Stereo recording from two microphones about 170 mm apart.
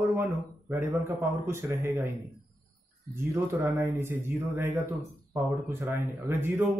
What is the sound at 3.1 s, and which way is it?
Speech, 15° right (ahead or behind).